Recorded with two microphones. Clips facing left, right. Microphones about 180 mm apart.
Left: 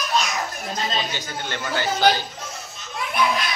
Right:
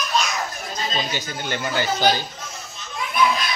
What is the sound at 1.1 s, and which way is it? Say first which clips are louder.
Speech: right 2 dB; 10° right (ahead or behind).